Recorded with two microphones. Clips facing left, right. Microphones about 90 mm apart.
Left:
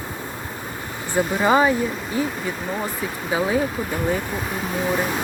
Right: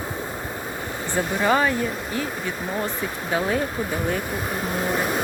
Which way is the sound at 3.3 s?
10° left (ahead or behind).